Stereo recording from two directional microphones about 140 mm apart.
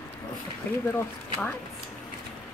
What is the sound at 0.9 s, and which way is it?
Speech, 15° left (ahead or behind).